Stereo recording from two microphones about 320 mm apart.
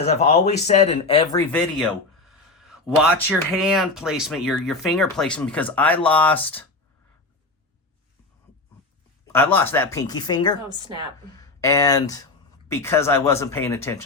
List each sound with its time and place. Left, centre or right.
0.0 s speech: centre
1.8 s speech: centre
9.2 s speech: centre
11.6 s speech: centre